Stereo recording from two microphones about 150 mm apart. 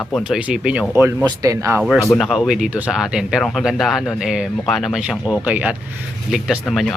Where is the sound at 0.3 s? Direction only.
10° right (ahead or behind).